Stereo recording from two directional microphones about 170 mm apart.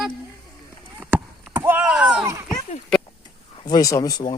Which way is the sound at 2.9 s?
5° left (ahead or behind).